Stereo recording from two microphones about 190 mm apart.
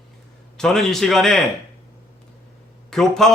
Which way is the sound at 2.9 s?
Centre (ahead or behind).